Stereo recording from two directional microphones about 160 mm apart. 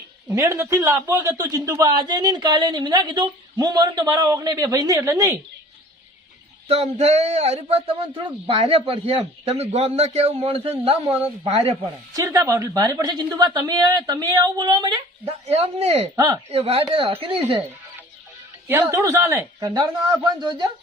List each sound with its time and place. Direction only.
0.3 s a man's voice: 15° right (ahead or behind)
6.7 s speech: 40° right (ahead or behind)
12.1 s a man's voice: 20° right (ahead or behind)
15.3 s speech: 40° right (ahead or behind)
16.1 s a man's voice: 20° right (ahead or behind)
16.5 s speech: 40° right (ahead or behind)
18.7 s a man's voice: 15° right (ahead or behind)